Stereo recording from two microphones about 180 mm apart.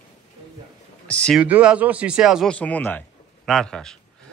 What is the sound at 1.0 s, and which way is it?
Speech, 5° left (ahead or behind).